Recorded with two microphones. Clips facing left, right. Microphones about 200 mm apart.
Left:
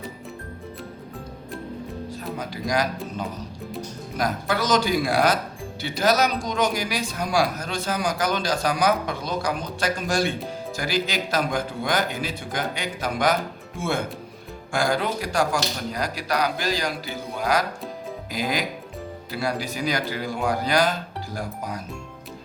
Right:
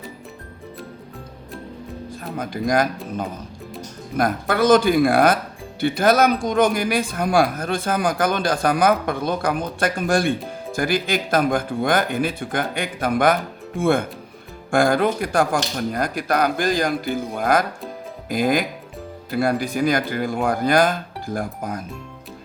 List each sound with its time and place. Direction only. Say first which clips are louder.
2.0 s speech: right 5 dB; 50° right (ahead or behind)